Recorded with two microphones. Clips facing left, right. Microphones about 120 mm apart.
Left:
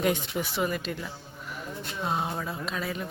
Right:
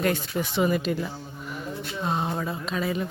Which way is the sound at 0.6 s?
5° right (ahead or behind).